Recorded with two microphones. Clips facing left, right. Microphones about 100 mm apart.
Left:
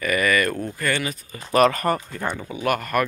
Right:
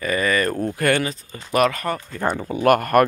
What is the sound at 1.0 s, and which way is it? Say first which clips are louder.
Speech: right 3 dB; 30° right (ahead or behind).